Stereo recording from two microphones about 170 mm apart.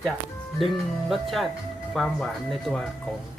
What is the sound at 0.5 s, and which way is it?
Speech, centre (ahead or behind).